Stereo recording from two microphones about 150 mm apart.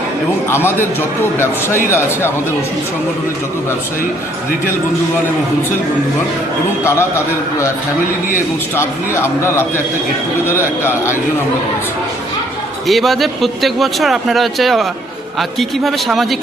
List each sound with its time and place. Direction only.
0.5 s a man's voice: 15° left (ahead or behind)
8.7 s a man's voice: 15° left (ahead or behind)
12.9 s speech: centre (ahead or behind)